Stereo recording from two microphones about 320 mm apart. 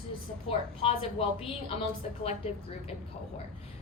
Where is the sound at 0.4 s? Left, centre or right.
Centre.